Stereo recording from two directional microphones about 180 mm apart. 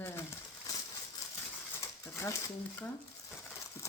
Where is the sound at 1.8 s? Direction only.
15° left (ahead or behind).